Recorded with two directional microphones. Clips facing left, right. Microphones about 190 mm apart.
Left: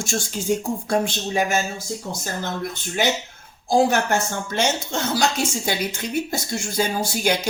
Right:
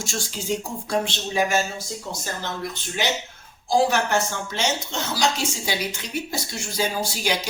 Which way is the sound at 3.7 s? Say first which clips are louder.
Left 2 dB; 50° left (ahead or behind).